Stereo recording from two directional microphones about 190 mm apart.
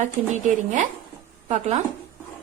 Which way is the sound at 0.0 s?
40° right (ahead or behind).